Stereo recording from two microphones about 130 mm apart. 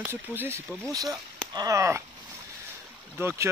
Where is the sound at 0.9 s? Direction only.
30° right (ahead or behind).